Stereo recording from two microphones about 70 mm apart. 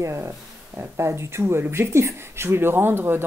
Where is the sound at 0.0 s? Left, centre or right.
Right.